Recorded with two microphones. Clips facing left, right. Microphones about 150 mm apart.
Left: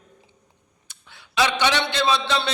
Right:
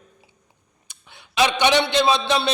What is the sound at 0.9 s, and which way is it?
A man's voice, 15° right (ahead or behind).